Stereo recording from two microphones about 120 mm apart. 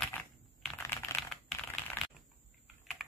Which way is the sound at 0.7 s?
20° left (ahead or behind).